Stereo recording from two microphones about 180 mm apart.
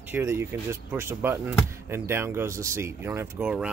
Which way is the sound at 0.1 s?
15° right (ahead or behind).